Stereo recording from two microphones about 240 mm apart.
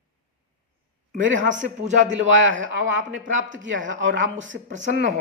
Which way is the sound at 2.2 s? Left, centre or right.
Right.